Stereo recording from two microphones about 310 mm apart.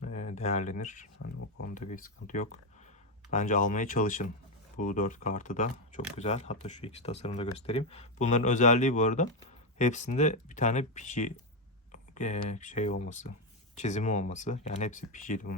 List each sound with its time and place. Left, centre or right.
0.0 s speech: left
1.2 s speech: left
1.7 s speech: left